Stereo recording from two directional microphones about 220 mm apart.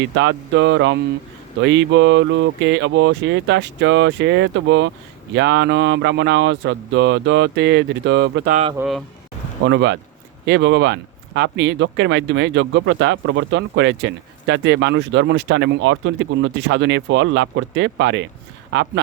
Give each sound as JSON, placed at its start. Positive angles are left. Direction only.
{"t": 0.0, "sound": "speech", "side_deg": -60}
{"t": 8.4, "sound": "speech", "side_deg": -30}
{"t": 8.8, "sound": "speech", "side_deg": 0}
{"t": 9.6, "sound": "speech", "side_deg": -55}